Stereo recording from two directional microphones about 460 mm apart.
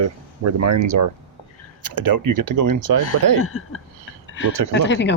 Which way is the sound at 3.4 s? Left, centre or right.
Left.